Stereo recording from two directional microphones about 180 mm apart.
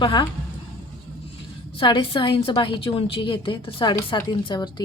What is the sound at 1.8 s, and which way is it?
Speech, 30° left (ahead or behind).